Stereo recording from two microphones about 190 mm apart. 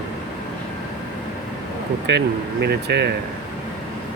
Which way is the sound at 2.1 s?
65° right (ahead or behind).